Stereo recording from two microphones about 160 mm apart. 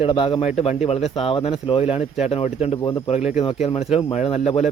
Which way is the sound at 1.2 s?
40° left (ahead or behind).